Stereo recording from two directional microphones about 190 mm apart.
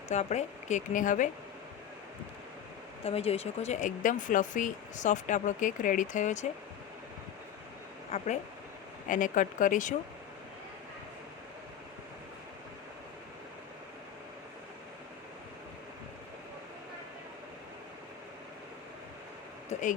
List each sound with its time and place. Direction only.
0.1 s speech: 35° left (ahead or behind)
3.0 s speech: 30° left (ahead or behind)
8.1 s speech: 35° left (ahead or behind)
19.7 s a sound: 35° left (ahead or behind)